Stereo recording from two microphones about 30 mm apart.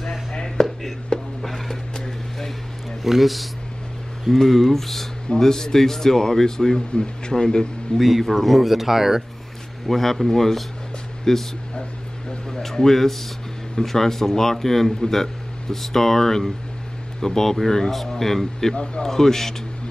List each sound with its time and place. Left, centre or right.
0.6 s a sound: centre
1.1 s a sound: left
2.0 s a sound: centre
3.0 s speech: centre
4.5 s speech: centre
5.4 s speech: centre
7.0 s speech: left
8.0 s speech: centre
9.8 s speech: centre
12.7 s speech: centre